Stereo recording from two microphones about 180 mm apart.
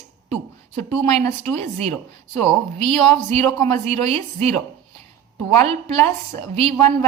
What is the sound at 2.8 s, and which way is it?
A woman's voice, 35° right (ahead or behind).